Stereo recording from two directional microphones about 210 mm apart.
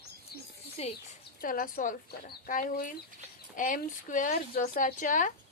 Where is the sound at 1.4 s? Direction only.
40° left (ahead or behind).